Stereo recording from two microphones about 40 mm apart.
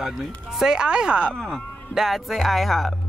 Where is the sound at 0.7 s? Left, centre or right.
Right.